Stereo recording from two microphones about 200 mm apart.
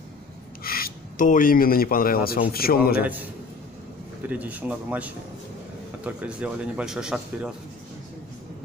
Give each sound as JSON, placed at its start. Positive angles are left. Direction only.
{"t": 0.7, "sound": "speech", "side_deg": 45}
{"t": 3.0, "sound": "speech", "side_deg": -10}
{"t": 4.3, "sound": "speech", "side_deg": -10}